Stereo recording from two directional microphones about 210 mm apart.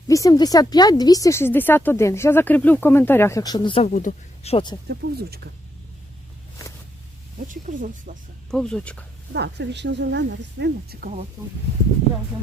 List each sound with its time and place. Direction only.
0.1 s speech: 15° left (ahead or behind)
3.9 s speech: 40° left (ahead or behind)
4.5 s speech: 20° left (ahead or behind)
4.9 s speech: 50° right (ahead or behind)
7.4 s speech: 40° right (ahead or behind)
8.4 s speech: 5° left (ahead or behind)
9.3 s a woman's voice: 55° right (ahead or behind)